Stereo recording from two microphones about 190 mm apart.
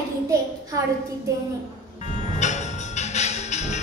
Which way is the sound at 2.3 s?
40° left (ahead or behind).